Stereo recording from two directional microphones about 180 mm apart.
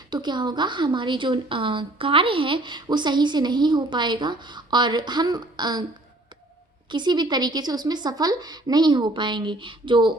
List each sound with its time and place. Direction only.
0.1 s speech: 25° right (ahead or behind)
6.9 s speech: 25° right (ahead or behind)